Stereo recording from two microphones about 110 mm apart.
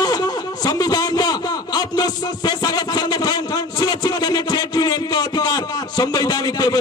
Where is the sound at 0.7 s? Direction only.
35° left (ahead or behind).